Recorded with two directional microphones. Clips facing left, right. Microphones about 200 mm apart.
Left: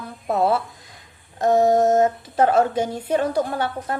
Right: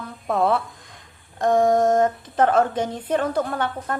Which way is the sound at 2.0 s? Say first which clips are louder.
Left 1 dB; 10° left (ahead or behind).